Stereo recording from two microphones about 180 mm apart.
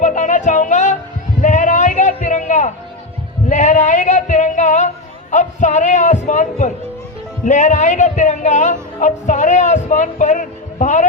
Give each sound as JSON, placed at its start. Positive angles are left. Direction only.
{"t": 0.0, "sound": "music", "side_deg": 45}
{"t": 1.4, "sound": "a sound", "side_deg": 45}
{"t": 3.5, "sound": "music", "side_deg": 45}
{"t": 5.3, "sound": "speech", "side_deg": 40}